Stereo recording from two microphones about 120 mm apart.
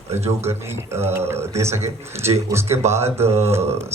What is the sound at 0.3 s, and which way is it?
A man's voice, 20° right (ahead or behind).